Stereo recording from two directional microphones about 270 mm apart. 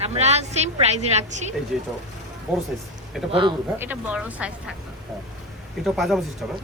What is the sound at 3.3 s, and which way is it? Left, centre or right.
Speech, centre.